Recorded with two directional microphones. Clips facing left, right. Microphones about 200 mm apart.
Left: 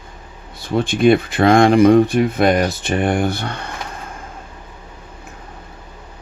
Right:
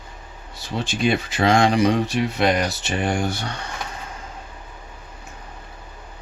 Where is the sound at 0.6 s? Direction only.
55° left (ahead or behind).